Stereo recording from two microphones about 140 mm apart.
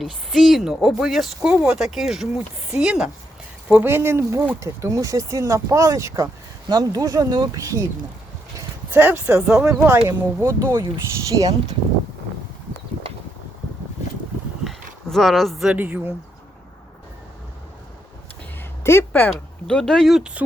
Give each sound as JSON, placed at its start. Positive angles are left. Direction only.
{"t": 0.0, "sound": "speech", "side_deg": 0}
{"t": 8.5, "sound": "a sound", "side_deg": -15}
{"t": 9.5, "sound": "speech", "side_deg": -5}
{"t": 14.6, "sound": "a sound", "side_deg": 0}
{"t": 15.8, "sound": "speech", "side_deg": -10}
{"t": 18.8, "sound": "speech", "side_deg": 20}